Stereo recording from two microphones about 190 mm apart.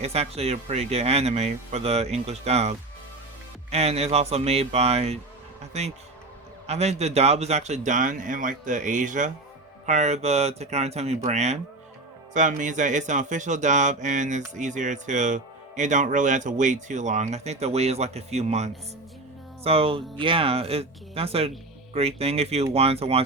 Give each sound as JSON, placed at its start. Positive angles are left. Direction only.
{"t": 0.0, "sound": "speech", "side_deg": -35}